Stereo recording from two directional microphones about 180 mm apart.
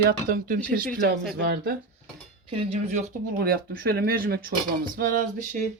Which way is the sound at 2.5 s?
30° right (ahead or behind).